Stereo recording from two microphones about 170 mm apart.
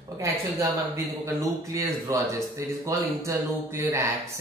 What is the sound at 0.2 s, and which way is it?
Speech, 20° right (ahead or behind).